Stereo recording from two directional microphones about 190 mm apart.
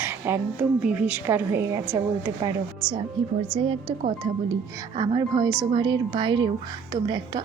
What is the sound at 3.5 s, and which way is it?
Speech, 25° right (ahead or behind).